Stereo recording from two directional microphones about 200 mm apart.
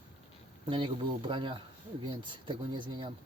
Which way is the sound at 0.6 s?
25° right (ahead or behind).